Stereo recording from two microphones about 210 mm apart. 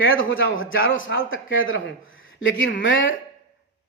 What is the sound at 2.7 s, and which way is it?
Speech, 60° left (ahead or behind).